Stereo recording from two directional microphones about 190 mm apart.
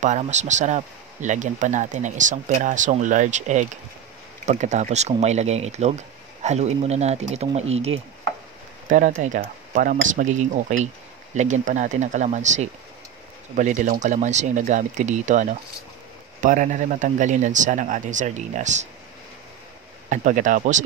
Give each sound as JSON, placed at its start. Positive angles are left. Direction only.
{"t": 0.0, "sound": "speech", "side_deg": -40}
{"t": 20.1, "sound": "speech", "side_deg": -40}